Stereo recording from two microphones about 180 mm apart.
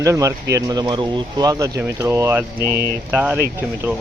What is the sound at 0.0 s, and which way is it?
Speech, 15° right (ahead or behind).